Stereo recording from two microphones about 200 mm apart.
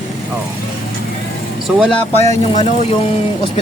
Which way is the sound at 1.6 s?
Centre (ahead or behind).